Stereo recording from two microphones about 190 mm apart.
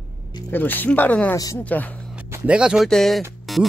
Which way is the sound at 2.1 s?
10° right (ahead or behind).